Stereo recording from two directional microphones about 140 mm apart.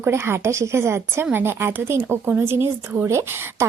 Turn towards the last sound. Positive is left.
turn(degrees=-15)  # may be behind; listen again after turning